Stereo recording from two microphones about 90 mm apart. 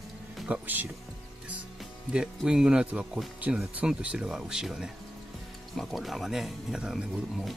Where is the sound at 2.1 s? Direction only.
10° right (ahead or behind).